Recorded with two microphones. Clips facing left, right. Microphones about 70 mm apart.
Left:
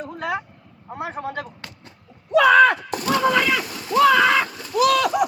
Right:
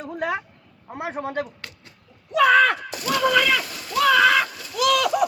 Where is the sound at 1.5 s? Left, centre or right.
Left.